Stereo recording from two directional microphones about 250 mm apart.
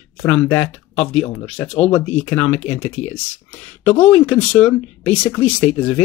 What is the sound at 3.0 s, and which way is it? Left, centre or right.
Speech, left.